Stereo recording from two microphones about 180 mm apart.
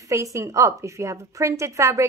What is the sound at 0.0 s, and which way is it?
A woman's voice, 15° right (ahead or behind).